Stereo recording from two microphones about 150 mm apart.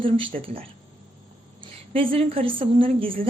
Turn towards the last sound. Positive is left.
turn(degrees=-35)  # may be behind; listen again after turning